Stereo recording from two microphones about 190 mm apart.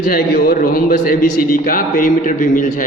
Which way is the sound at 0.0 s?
50° left (ahead or behind).